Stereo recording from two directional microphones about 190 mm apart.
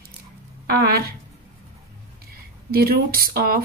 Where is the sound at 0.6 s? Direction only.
55° right (ahead or behind).